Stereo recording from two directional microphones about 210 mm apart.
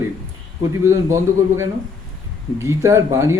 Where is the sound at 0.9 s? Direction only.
15° right (ahead or behind).